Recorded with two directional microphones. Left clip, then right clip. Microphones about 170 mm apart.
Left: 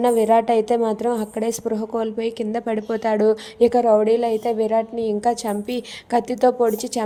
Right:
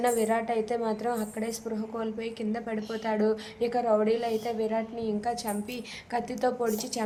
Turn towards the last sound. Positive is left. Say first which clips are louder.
# left 10 dB
turn(degrees=30)  # may be behind; listen again after turning